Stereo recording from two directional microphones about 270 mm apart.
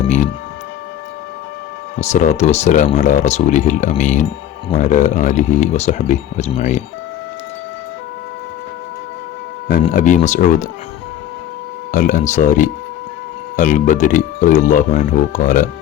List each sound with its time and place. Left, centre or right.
2.0 s speech: left
9.9 s speech: left
11.9 s speech: left